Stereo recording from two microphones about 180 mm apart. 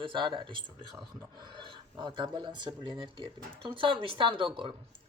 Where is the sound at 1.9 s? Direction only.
25° right (ahead or behind).